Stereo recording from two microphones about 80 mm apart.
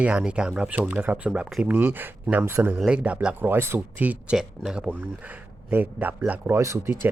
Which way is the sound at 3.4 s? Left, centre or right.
Right.